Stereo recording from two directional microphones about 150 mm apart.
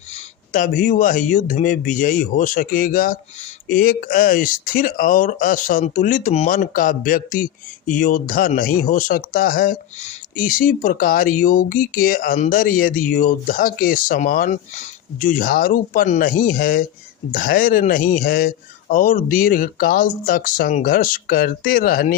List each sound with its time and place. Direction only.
0.5 s speech: 60° left (ahead or behind)
10.0 s speech: 55° left (ahead or behind)